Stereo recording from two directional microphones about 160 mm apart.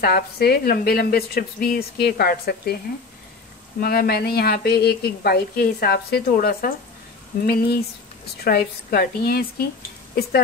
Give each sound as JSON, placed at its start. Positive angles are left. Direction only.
{"t": 0.0, "sound": "a woman's voice", "side_deg": 75}
{"t": 3.8, "sound": "a woman's voice", "side_deg": 70}
{"t": 7.4, "sound": "a woman's voice", "side_deg": 80}